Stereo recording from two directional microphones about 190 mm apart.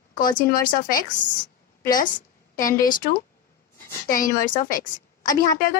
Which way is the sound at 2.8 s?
45° left (ahead or behind).